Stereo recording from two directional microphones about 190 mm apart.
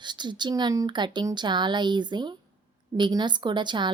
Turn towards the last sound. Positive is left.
turn(degrees=-25)  # may be behind; listen again after turning